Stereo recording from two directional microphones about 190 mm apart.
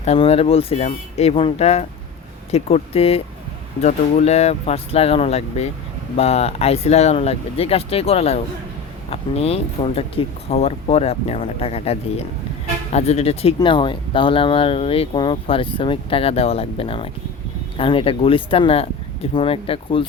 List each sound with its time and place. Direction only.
0.0 s speech: 30° left (ahead or behind)